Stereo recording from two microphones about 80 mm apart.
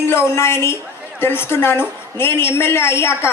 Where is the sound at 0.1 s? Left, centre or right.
Left.